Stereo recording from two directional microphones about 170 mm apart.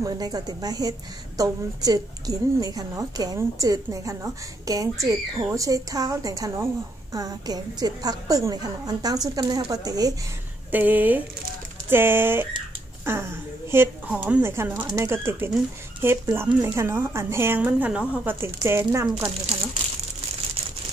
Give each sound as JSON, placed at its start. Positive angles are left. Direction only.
{"t": 0.0, "sound": "a woman's voice", "side_deg": -20}
{"t": 10.7, "sound": "speech", "side_deg": -10}